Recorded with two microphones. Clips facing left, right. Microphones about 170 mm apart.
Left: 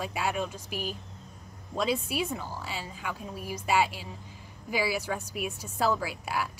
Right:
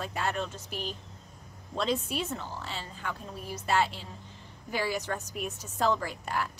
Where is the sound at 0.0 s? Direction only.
10° left (ahead or behind).